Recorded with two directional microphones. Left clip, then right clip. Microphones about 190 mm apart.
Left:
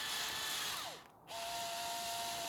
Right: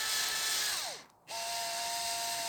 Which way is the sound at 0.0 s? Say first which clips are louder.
Right 6 dB; 50° right (ahead or behind).